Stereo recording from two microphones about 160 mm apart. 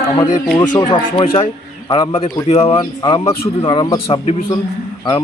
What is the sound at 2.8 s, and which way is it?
A man's voice, 25° left (ahead or behind).